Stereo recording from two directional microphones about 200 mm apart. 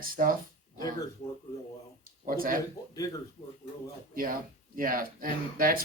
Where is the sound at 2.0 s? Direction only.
45° right (ahead or behind).